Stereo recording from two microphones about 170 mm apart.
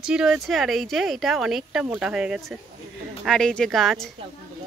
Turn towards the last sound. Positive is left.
turn(degrees=0)  # may be behind; listen again after turning